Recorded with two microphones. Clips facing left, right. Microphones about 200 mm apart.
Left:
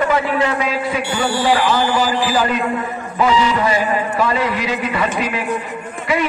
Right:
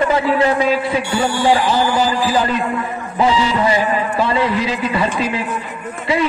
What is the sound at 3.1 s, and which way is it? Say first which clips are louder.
A man's voice: even; 30° right (ahead or behind).